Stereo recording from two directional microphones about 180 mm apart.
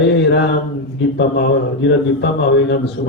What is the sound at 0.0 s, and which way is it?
Mantra, 80° left.